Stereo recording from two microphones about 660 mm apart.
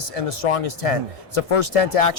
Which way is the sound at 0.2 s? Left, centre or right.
Left.